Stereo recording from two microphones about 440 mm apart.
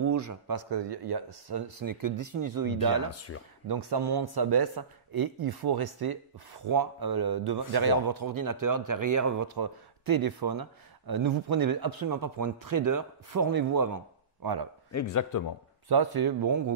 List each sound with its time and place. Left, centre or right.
0.0 s a man's voice: right
3.1 s a man's voice: left
3.6 s a man's voice: right
14.9 s a man's voice: left
15.9 s a man's voice: right